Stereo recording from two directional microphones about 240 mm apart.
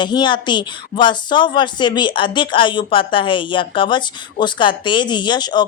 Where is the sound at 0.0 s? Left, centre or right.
Centre.